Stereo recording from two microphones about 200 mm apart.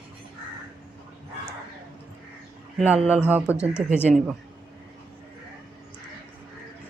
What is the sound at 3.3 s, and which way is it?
Speech, 10° right (ahead or behind).